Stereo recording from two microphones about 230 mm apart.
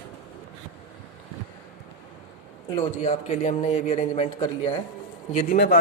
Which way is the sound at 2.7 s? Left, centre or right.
Left.